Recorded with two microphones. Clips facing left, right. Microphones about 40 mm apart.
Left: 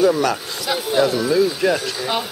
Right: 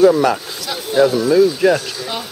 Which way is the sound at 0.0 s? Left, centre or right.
Centre.